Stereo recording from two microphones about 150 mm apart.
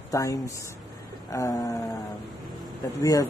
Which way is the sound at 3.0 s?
20° left (ahead or behind).